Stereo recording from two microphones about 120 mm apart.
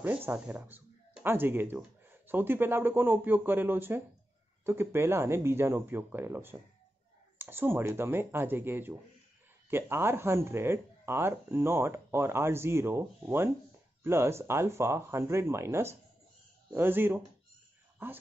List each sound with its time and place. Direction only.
0.0 s a man's voice: 15° right (ahead or behind)